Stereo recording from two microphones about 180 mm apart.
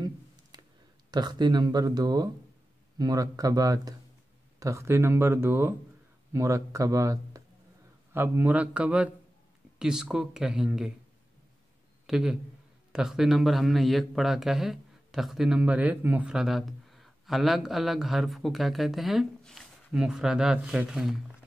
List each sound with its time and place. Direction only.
1.1 s a man's voice: 25° right (ahead or behind); by 10.9 s 5° right (ahead or behind)
12.1 s a man's voice: 5° right (ahead or behind)